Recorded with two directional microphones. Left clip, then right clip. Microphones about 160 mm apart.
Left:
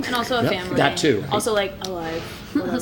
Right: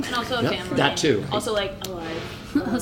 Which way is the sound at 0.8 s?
10° left (ahead or behind).